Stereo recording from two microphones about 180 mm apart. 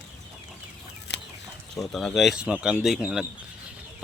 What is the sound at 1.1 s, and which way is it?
Chicken, 70° left (ahead or behind).